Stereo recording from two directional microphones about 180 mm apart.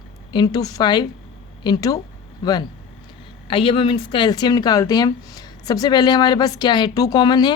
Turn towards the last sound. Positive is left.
turn(degrees=25)  # may be behind; listen again after turning